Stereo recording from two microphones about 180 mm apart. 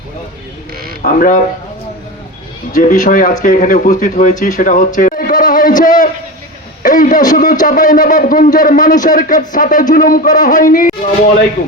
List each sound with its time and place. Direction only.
1.0 s speech: 50° left (ahead or behind)
2.7 s speech: 45° left (ahead or behind)
4.9 s a sound: 50° left (ahead or behind)
6.8 s speech: 50° left (ahead or behind)